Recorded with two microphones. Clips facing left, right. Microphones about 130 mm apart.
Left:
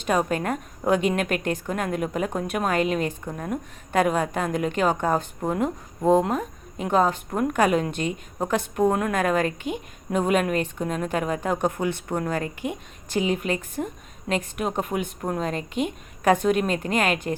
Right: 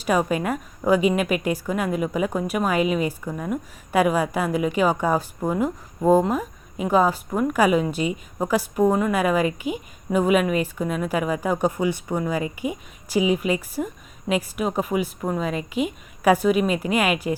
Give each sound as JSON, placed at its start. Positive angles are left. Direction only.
{"t": 0.0, "sound": "a woman's voice", "side_deg": -5}